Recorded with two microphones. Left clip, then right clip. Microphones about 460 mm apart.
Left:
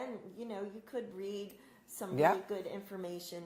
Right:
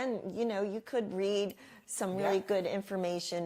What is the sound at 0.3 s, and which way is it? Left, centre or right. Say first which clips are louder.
A woman's voice: right 10 dB; right.